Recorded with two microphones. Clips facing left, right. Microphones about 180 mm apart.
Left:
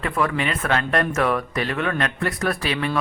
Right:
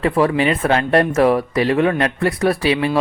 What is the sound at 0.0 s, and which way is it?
Speech, 30° right (ahead or behind).